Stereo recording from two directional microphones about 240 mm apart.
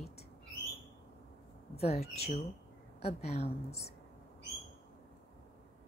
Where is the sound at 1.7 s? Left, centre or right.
Left.